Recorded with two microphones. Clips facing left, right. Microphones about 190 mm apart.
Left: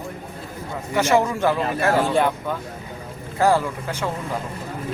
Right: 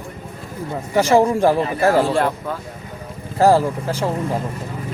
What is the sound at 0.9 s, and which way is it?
Speech, 35° right (ahead or behind).